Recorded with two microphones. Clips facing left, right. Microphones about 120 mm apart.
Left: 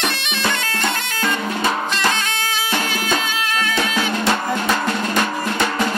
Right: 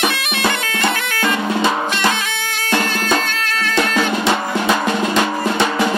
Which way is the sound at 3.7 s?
60° right (ahead or behind).